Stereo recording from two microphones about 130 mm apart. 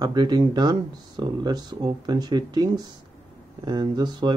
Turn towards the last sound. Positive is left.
turn(degrees=-35)  # may be behind; listen again after turning